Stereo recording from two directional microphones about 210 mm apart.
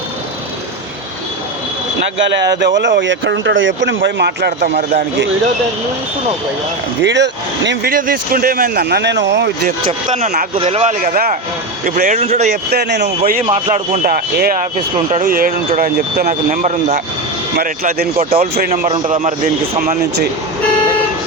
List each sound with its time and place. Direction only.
2.6 s speech: 55° right (ahead or behind)
7.0 s speech: 55° right (ahead or behind)
7.9 s speech: 40° right (ahead or behind)
9.6 s speech: 35° right (ahead or behind)
11.0 s speech: 45° right (ahead or behind)
12.7 s speech: 50° right (ahead or behind)
13.4 s speech: 30° right (ahead or behind)
14.1 s speech: 45° right (ahead or behind)
17.6 s speech: 45° right (ahead or behind)
18.7 s a man's voice: 25° right (ahead or behind)